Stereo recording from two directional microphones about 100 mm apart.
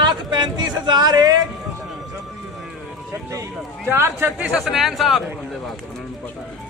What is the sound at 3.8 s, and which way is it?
Speech, 25° right (ahead or behind).